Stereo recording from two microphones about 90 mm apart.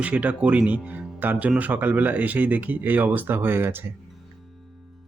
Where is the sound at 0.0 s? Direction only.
15° right (ahead or behind).